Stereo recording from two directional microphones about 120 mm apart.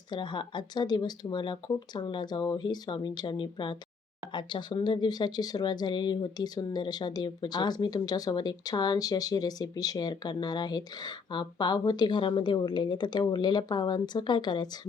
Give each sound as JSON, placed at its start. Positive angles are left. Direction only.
{"t": 0.1, "sound": "speech", "side_deg": 40}